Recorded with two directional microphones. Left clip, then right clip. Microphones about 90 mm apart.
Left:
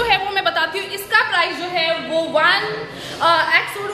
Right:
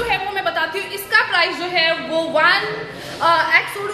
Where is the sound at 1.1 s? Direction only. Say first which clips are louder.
Even; 15° right (ahead or behind).